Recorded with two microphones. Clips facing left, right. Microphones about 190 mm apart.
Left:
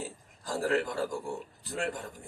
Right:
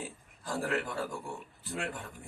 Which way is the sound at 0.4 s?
40° left (ahead or behind).